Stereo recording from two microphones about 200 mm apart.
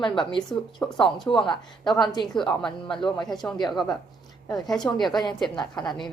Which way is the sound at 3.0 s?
20° left (ahead or behind).